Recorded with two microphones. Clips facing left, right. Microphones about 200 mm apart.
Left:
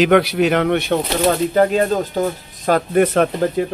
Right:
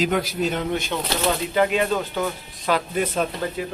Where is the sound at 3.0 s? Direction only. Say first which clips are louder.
Left 8 dB; 65° left (ahead or behind).